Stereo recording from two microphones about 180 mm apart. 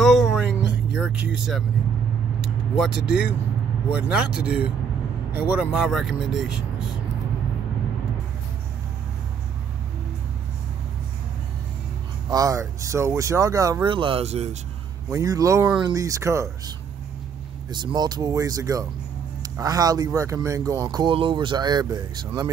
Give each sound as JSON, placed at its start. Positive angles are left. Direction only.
{"t": 0.0, "sound": "a sound", "side_deg": 0}
{"t": 0.6, "sound": "music", "side_deg": -5}
{"t": 2.4, "sound": "vehicle", "side_deg": -5}
{"t": 3.1, "sound": "speech", "side_deg": -5}
{"t": 12.3, "sound": "speech", "side_deg": -20}
{"t": 15.0, "sound": "speech", "side_deg": -20}